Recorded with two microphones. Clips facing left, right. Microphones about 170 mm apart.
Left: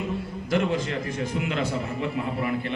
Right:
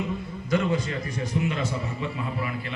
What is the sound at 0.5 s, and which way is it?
A man's voice, 65° left (ahead or behind).